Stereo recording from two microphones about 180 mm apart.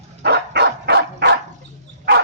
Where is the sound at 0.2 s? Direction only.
70° right (ahead or behind).